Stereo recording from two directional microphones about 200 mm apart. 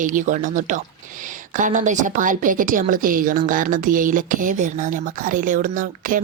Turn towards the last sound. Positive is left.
turn(degrees=-40)  # may be behind; listen again after turning